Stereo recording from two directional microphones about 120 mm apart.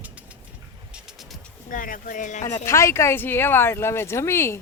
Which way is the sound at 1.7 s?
90° left.